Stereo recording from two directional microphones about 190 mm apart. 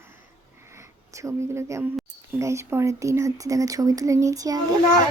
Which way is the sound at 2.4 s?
15° right (ahead or behind).